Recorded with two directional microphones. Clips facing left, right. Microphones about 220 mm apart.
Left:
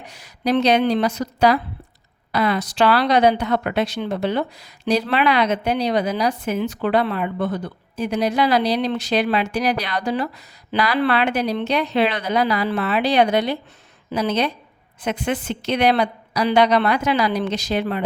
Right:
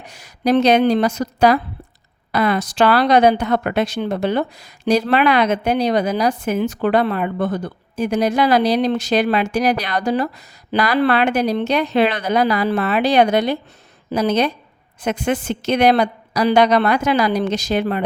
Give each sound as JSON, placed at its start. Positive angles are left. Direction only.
{"t": 0.0, "sound": "speech", "side_deg": -45}